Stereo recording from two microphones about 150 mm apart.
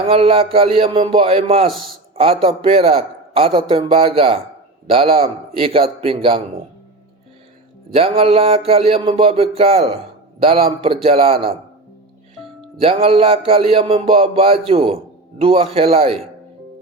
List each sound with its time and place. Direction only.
0.0 s music: 40° right (ahead or behind)
7.9 s music: 40° right (ahead or behind)
12.8 s music: 40° right (ahead or behind)